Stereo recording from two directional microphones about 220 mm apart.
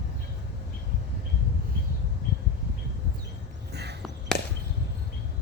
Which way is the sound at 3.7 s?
50° right (ahead or behind).